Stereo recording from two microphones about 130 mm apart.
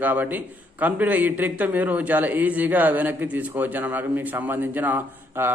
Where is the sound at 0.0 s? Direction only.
15° right (ahead or behind).